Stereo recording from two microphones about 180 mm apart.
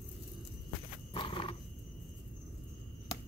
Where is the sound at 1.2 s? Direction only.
30° left (ahead or behind).